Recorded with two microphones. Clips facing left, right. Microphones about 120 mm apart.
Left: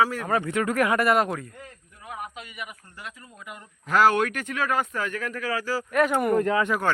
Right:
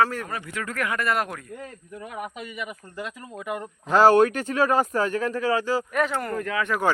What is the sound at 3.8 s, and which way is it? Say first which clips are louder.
Speech: right 4 dB; 30° right (ahead or behind).